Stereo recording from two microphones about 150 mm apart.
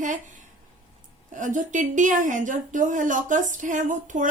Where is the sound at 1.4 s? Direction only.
60° right (ahead or behind).